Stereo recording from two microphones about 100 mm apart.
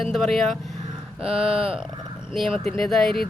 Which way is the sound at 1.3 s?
65° right (ahead or behind).